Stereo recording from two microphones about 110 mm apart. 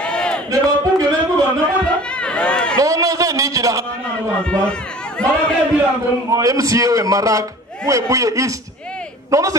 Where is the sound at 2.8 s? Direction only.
30° right (ahead or behind).